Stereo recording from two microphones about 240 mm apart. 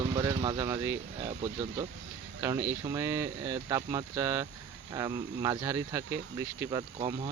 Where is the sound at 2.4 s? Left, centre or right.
Centre.